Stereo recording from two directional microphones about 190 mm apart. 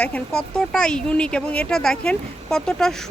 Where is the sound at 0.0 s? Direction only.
5° left (ahead or behind).